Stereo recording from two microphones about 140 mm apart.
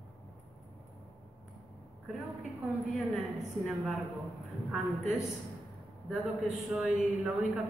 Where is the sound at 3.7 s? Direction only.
Centre (ahead or behind).